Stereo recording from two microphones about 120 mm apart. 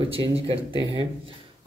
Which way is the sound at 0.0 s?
50° right (ahead or behind).